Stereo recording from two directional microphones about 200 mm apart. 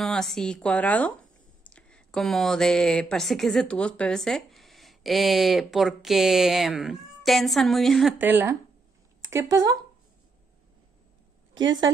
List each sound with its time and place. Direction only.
0.0 s speech: centre (ahead or behind); by 9.8 s 15° right (ahead or behind)
11.5 s a woman's voice: 70° right (ahead or behind)